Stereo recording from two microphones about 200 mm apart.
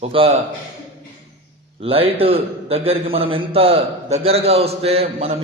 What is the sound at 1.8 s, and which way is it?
A man's voice, 30° right (ahead or behind).